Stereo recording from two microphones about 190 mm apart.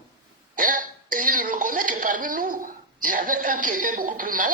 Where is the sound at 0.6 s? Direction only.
45° right (ahead or behind).